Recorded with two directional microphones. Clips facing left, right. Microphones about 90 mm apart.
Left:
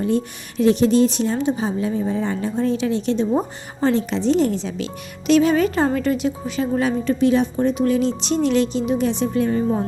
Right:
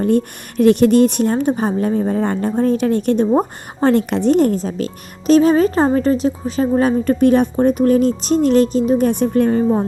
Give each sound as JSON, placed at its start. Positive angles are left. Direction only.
{"t": 0.0, "sound": "speech", "side_deg": -55}